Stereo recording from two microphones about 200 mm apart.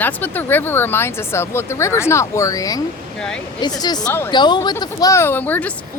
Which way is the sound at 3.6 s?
20° left (ahead or behind).